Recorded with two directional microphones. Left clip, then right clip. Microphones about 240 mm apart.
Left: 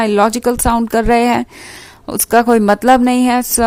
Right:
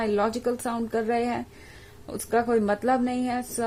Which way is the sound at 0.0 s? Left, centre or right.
Left.